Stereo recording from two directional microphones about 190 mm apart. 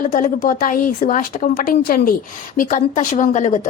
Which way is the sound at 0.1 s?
45° left (ahead or behind).